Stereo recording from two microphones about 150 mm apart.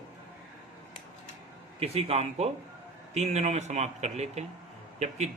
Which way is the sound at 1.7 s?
40° right (ahead or behind).